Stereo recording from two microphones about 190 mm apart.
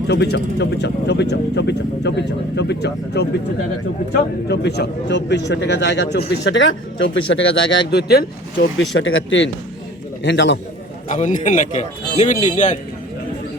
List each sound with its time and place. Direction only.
0.1 s a man's voice: 60° left (ahead or behind)
4.4 s a man's voice: 65° left (ahead or behind); by 9.5 s 80° left
10.2 s a man's voice: 65° left (ahead or behind)
11.1 s speech: 40° left (ahead or behind)